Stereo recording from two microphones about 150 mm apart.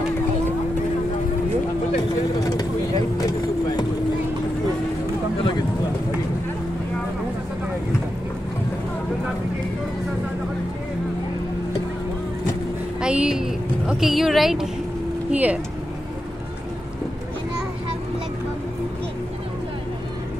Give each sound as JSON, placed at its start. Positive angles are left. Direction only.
{"t": 2.4, "sound": "vehicle", "side_deg": 25}
{"t": 13.0, "sound": "speech", "side_deg": -5}